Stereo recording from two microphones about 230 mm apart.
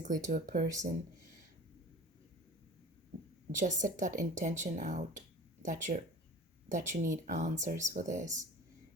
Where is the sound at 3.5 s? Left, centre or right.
Right.